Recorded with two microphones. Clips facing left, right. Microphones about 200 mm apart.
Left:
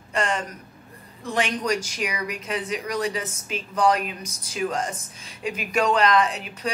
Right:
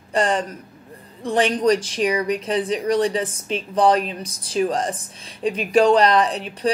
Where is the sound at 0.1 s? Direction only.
35° right (ahead or behind).